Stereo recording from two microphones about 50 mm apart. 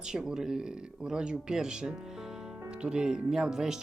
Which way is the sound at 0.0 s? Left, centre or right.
Centre.